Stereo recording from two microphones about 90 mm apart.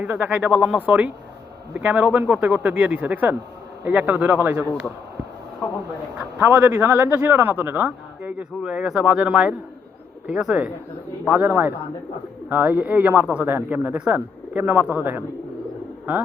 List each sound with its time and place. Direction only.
0.0 s a man's voice: 15° right (ahead or behind)
6.5 s a man's voice: 20° right (ahead or behind)